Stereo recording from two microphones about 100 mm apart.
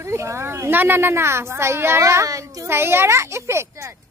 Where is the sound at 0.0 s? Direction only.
30° right (ahead or behind).